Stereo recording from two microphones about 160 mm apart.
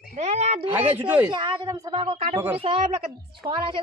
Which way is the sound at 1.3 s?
30° right (ahead or behind).